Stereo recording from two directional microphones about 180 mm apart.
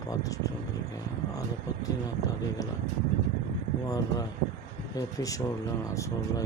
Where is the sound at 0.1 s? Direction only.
20° left (ahead or behind).